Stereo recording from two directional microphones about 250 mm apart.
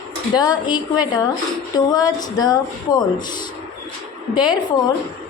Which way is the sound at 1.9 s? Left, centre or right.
Centre.